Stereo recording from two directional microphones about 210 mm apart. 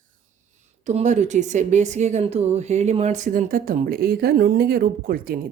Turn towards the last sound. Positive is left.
turn(degrees=-45)  # may be behind; listen again after turning